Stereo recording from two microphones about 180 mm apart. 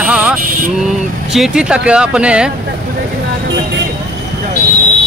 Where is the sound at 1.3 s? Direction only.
5° right (ahead or behind).